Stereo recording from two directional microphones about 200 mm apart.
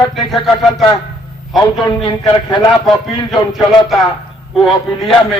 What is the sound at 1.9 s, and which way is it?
Speech, 20° left (ahead or behind).